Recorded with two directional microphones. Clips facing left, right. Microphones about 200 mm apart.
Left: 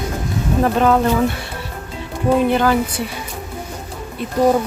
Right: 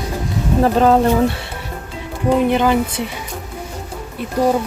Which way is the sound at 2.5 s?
20° right (ahead or behind).